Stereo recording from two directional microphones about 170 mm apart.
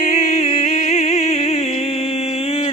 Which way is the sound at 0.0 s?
40° left (ahead or behind).